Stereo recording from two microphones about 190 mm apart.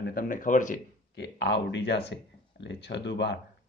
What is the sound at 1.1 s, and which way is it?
Speech, 65° left (ahead or behind).